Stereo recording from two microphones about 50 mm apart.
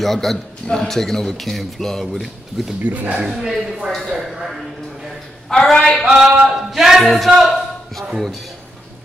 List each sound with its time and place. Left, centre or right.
0.0 s a man's voice: centre
2.1 s speech: centre
2.8 s speech: right
3.2 s speech: centre
5.5 s a man's voice: centre
6.0 s speech: centre